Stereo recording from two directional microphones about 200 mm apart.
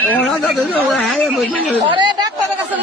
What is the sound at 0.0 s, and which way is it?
Chatter, 5° left (ahead or behind).